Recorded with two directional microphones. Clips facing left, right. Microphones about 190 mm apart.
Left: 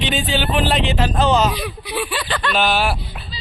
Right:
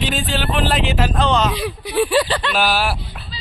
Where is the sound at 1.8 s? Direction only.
40° right (ahead or behind).